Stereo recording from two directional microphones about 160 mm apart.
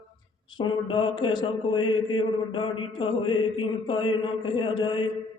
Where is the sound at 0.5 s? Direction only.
30° left (ahead or behind).